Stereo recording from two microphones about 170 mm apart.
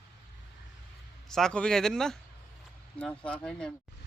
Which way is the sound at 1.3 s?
5° left (ahead or behind).